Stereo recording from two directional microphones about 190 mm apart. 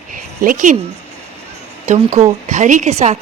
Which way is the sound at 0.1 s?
45° right (ahead or behind).